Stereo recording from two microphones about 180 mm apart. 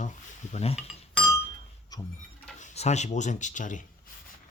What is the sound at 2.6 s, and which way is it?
Speech, 40° left (ahead or behind).